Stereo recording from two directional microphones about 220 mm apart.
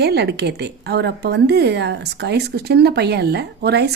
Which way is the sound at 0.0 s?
50° right (ahead or behind).